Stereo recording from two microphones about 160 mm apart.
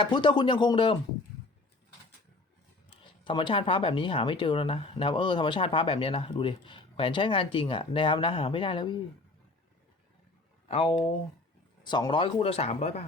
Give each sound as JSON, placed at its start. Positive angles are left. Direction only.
{"t": 0.0, "sound": "speech", "side_deg": 30}
{"t": 3.2, "sound": "speech", "side_deg": 30}
{"t": 10.7, "sound": "speech", "side_deg": 40}
{"t": 11.8, "sound": "speech", "side_deg": 30}